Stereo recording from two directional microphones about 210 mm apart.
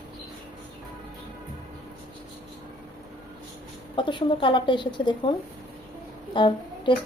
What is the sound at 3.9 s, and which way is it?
Speech, 25° left (ahead or behind).